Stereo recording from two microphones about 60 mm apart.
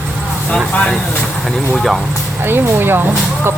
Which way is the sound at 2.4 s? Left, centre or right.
Right.